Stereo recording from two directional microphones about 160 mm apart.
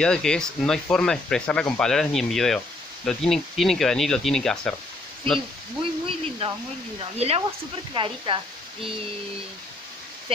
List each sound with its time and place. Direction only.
0.0 s speech: 5° left (ahead or behind)
5.8 s speech: 35° right (ahead or behind)